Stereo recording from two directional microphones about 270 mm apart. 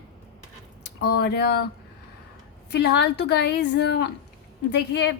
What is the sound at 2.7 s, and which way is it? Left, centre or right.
Speech, left.